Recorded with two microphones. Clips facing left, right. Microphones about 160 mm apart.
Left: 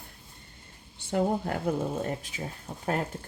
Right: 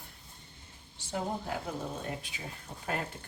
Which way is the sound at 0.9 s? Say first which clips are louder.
Left 8 dB; 55° left (ahead or behind).